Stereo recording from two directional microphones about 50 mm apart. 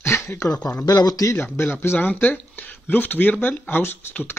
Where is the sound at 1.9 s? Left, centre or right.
Left.